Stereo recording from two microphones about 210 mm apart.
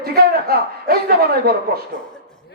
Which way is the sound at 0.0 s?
45° right (ahead or behind).